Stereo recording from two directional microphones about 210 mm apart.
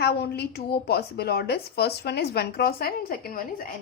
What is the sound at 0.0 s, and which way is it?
Speech, 50° left (ahead or behind).